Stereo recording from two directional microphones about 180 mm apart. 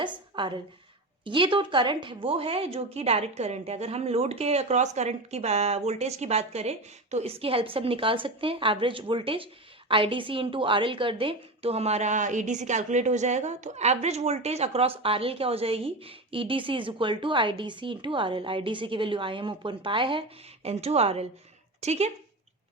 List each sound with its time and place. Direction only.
0.0 s a woman's voice: 25° right (ahead or behind)